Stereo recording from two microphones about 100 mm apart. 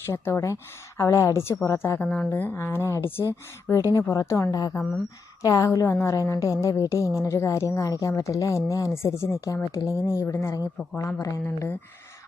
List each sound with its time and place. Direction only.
0.0 s a woman's voice: 25° left (ahead or behind)
2.0 s a woman's voice: 15° left (ahead or behind); by 10.6 s 35° left (ahead or behind)
11.4 s a woman's voice: 20° left (ahead or behind)